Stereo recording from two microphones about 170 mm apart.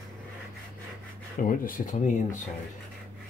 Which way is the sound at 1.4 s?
55° left (ahead or behind).